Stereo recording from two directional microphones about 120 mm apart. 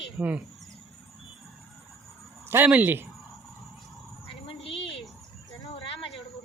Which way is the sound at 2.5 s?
15° right (ahead or behind).